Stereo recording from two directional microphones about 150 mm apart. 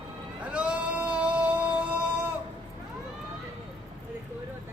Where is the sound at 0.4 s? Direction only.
10° right (ahead or behind).